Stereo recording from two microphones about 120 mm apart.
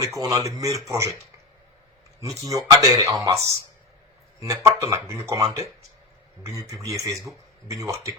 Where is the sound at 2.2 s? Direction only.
30° right (ahead or behind).